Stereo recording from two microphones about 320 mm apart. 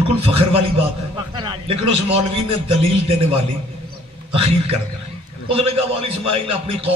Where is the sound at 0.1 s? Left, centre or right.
Centre.